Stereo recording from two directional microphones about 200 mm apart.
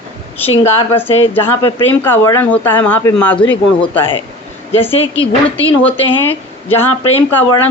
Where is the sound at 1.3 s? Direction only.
10° left (ahead or behind).